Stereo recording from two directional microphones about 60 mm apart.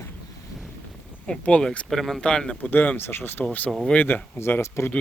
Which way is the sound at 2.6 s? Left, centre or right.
Left.